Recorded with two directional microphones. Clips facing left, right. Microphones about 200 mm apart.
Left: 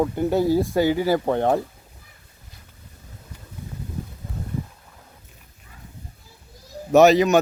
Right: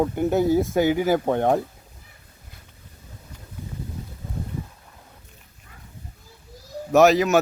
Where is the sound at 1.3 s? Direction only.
15° right (ahead or behind).